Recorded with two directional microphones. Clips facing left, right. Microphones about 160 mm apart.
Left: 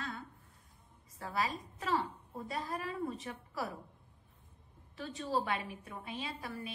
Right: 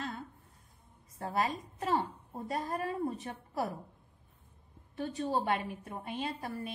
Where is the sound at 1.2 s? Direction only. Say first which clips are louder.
Right 3 dB; 40° right (ahead or behind).